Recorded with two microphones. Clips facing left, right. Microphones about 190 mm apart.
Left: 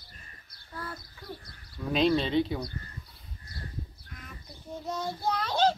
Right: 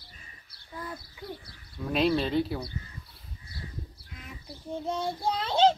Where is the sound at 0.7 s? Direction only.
15° right (ahead or behind).